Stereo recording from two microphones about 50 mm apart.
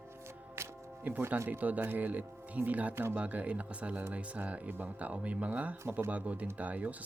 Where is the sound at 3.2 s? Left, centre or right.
Right.